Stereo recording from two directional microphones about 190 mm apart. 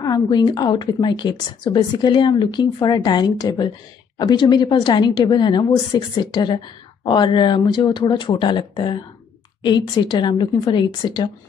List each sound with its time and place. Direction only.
0.0 s a woman's voice: 20° left (ahead or behind)